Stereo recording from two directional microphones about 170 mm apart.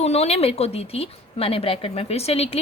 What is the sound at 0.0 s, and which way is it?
A woman's voice, 40° left (ahead or behind).